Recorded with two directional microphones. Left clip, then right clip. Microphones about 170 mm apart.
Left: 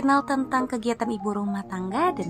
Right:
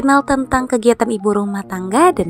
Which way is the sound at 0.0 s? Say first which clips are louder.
Right 8 dB; 35° right (ahead or behind).